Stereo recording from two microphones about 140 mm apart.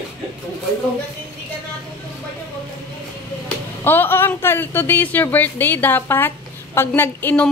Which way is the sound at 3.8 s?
15° left (ahead or behind).